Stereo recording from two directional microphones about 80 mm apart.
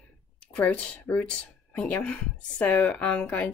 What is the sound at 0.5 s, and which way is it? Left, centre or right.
Speech, centre.